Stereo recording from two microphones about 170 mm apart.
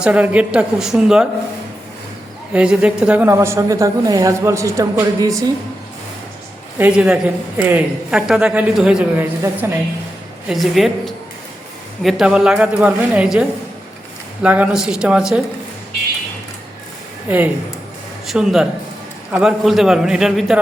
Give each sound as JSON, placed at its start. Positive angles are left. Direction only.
{"t": 0.0, "sound": "a woman's voice", "side_deg": -10}
{"t": 2.5, "sound": "a woman's voice", "side_deg": -5}
{"t": 6.7, "sound": "a woman's voice", "side_deg": -10}
{"t": 10.5, "sound": "a woman's voice", "side_deg": 0}
{"t": 14.4, "sound": "a woman's voice", "side_deg": -10}
{"t": 17.2, "sound": "a woman's voice", "side_deg": -10}